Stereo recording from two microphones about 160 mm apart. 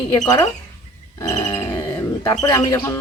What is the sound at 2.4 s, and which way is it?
Speech, 20° left (ahead or behind).